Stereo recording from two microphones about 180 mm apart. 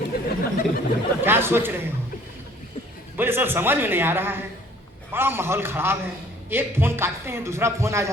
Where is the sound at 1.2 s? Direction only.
10° right (ahead or behind).